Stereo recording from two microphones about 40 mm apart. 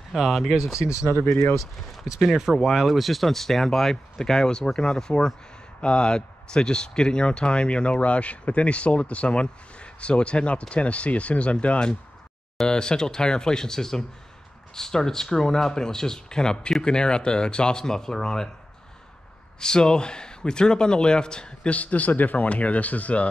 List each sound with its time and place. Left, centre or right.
0.1 s speech: centre
1.0 s speech: left
2.1 s speech: centre; by 11.5 s left
12.6 s speech: centre
19.6 s speech: centre
21.7 s speech: left